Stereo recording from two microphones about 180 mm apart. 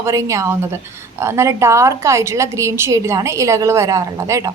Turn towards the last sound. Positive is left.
turn(degrees=-20)  # may be behind; listen again after turning